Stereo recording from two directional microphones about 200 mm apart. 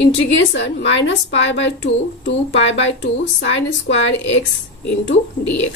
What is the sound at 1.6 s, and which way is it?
A woman's voice, 65° left (ahead or behind).